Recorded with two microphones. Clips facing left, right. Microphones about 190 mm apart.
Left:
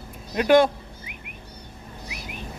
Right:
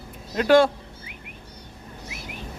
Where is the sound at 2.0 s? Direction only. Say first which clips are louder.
Even; 15° left (ahead or behind).